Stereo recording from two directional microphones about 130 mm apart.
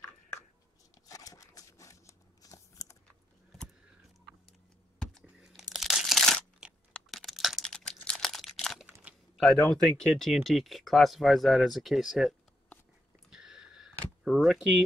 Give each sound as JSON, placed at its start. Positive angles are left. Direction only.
{"t": 1.0, "sound": "a sound", "side_deg": 25}
{"t": 4.5, "sound": "crumpling", "side_deg": 0}
{"t": 9.7, "sound": "speech", "side_deg": 5}
{"t": 13.3, "sound": "camera", "side_deg": -5}